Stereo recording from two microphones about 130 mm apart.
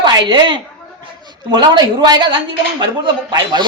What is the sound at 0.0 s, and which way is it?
A woman's voice, 35° right (ahead or behind).